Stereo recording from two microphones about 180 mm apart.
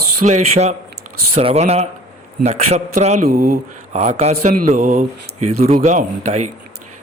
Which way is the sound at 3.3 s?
55° right (ahead or behind).